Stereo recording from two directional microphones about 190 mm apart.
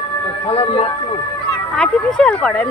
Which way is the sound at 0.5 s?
30° left (ahead or behind).